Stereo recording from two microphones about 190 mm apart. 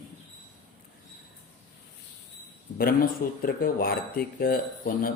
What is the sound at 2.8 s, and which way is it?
Speech, 50° left (ahead or behind).